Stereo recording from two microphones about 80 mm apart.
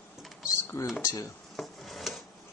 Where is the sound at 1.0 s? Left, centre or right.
Left.